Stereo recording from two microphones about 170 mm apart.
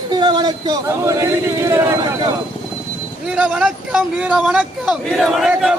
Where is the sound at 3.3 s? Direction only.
5° right (ahead or behind).